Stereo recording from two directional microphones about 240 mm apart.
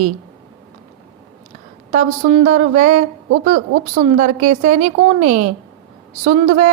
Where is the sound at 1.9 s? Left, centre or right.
Right.